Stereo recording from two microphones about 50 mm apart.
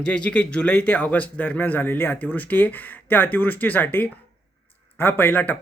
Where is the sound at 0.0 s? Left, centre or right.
Left.